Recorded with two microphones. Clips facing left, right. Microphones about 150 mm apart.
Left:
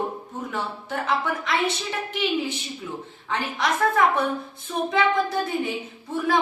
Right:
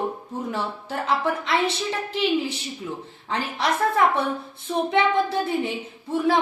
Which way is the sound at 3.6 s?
30° right (ahead or behind).